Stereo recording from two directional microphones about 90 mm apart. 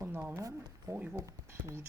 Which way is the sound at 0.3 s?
40° right (ahead or behind).